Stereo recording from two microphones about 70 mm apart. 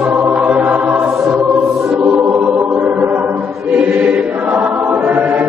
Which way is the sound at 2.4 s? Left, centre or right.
Right.